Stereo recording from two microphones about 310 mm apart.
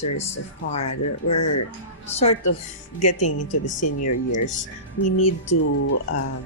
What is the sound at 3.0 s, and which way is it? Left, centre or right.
Speech, left.